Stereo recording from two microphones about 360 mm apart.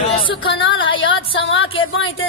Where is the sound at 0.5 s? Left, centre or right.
Left.